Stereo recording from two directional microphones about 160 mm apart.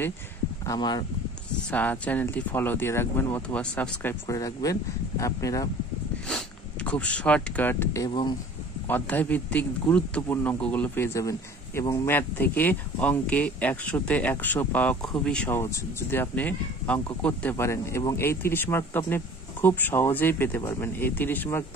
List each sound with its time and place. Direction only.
0.7 s speech: 25° left (ahead or behind)
1.7 s speech: 10° left (ahead or behind)
6.2 s speech: 5° left (ahead or behind)
8.1 s speech: 30° left (ahead or behind)
8.8 s speech: 10° left (ahead or behind)
12.1 s speech: 10° left (ahead or behind)